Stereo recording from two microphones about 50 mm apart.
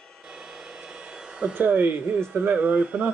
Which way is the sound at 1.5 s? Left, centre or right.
Right.